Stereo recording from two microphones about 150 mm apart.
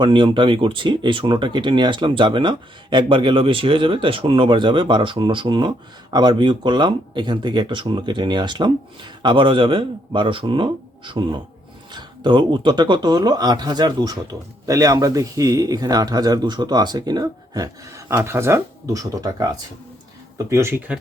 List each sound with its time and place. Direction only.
0.0 s speech: 35° right (ahead or behind); by 21.0 s 10° right (ahead or behind)